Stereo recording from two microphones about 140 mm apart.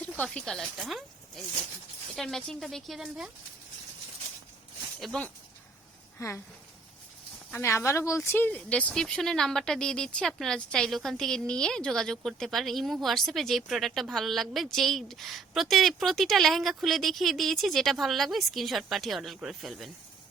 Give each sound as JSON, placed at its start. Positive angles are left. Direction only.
{"t": 0.0, "sound": "speech", "side_deg": 10}
{"t": 2.1, "sound": "speech", "side_deg": 0}
{"t": 4.9, "sound": "speech", "side_deg": 0}
{"t": 6.1, "sound": "speech", "side_deg": 20}
{"t": 7.5, "sound": "speech", "side_deg": 15}